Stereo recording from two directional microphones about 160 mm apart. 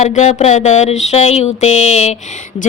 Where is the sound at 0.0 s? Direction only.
45° left (ahead or behind).